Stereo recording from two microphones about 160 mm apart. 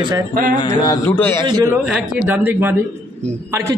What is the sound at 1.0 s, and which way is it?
Speech, 15° left (ahead or behind).